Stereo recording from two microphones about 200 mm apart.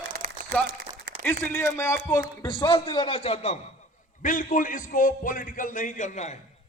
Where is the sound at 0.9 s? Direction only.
20° right (ahead or behind).